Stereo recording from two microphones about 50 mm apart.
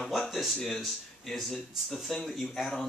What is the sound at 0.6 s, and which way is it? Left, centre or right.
Speech, centre.